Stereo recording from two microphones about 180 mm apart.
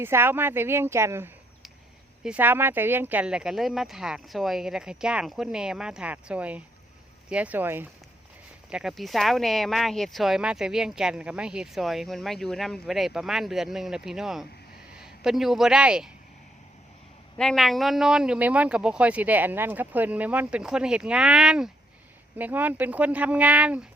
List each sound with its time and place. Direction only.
0.0 s speech: 10° right (ahead or behind)
17.3 s speech: 5° left (ahead or behind)